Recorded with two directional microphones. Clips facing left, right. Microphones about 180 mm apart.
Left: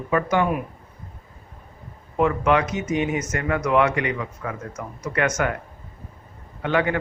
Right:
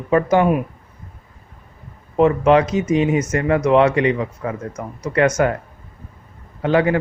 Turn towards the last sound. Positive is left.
turn(degrees=-30)  # may be behind; listen again after turning